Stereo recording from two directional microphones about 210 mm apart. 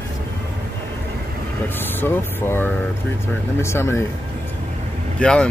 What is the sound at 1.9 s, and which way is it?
Speech, 10° left (ahead or behind).